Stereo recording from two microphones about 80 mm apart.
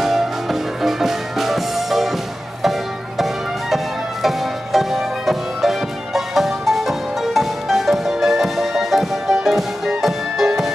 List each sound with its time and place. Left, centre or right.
0.0 s music: centre
3.7 s music: centre